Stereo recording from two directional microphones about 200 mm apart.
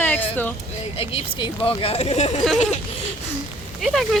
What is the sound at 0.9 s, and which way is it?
Speech, 30° left (ahead or behind).